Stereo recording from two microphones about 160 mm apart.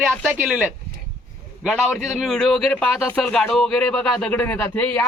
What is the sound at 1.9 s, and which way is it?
Speech, 45° right (ahead or behind).